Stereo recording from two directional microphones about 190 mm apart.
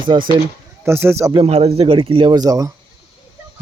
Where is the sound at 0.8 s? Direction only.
15° right (ahead or behind).